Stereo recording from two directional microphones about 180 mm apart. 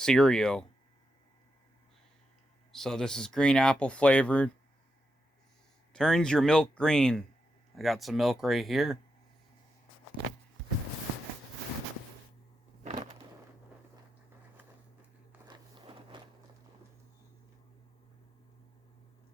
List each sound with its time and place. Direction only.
0.0 s speech: 5° left (ahead or behind)
2.7 s speech: centre (ahead or behind)
5.9 s speech: 5° left (ahead or behind)
12.8 s a sound: 40° right (ahead or behind)
15.4 s walk: 25° right (ahead or behind)